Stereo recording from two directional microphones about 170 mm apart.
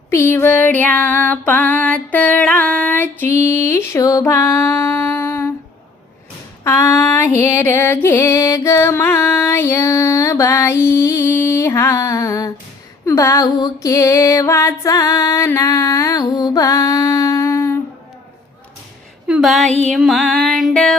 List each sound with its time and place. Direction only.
0.1 s music: 15° left (ahead or behind)
6.7 s music: 15° left (ahead or behind)
19.3 s a sound: centre (ahead or behind)
19.8 s music: centre (ahead or behind)